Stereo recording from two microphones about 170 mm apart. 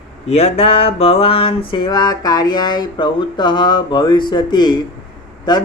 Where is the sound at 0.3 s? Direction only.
40° left (ahead or behind).